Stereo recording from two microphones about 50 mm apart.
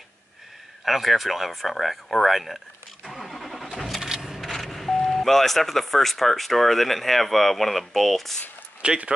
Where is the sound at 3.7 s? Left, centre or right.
Centre.